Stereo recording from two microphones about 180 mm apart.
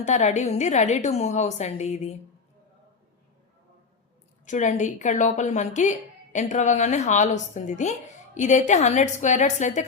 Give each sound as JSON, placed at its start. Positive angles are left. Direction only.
{"t": 0.0, "sound": "speech", "side_deg": 40}
{"t": 4.4, "sound": "speech", "side_deg": 45}